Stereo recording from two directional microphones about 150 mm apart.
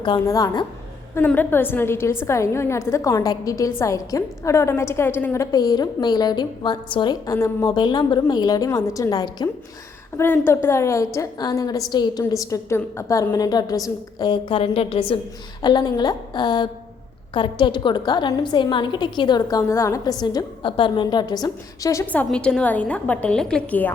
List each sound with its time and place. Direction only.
0.0 s a woman's voice: 25° left (ahead or behind)
1.1 s a woman's voice: 10° left (ahead or behind); by 9.5 s 25° left (ahead or behind)
10.2 s a woman's voice: 15° left (ahead or behind)
22.0 s a woman's voice: 10° left (ahead or behind)